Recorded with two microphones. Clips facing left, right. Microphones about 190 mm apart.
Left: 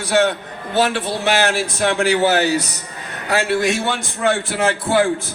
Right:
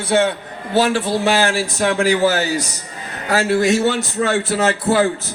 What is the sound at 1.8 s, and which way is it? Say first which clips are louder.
Speech: right 1 dB; 45° right (ahead or behind).